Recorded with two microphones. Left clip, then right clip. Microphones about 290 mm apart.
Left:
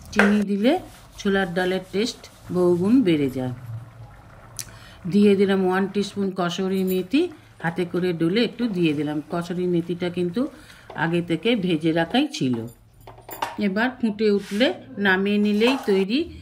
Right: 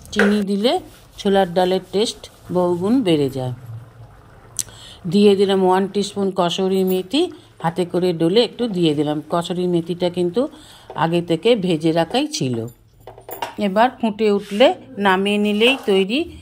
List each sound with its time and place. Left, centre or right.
0.1 s speech: centre
4.6 s speech: centre
13.6 s speech: centre